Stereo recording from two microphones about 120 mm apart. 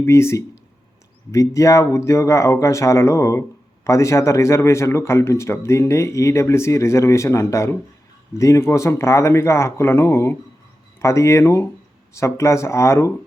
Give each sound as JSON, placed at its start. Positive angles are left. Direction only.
{"t": 0.0, "sound": "speech", "side_deg": 20}